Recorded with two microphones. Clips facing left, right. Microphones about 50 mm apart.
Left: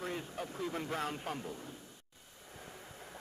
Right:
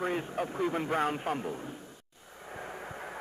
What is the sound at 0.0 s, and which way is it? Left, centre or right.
Speech, right.